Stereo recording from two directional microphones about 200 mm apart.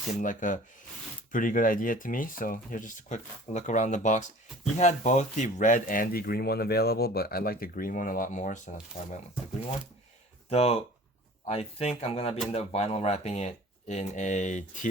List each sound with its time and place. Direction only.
0.2 s speech: 40° left (ahead or behind)
10.5 s speech: 30° left (ahead or behind)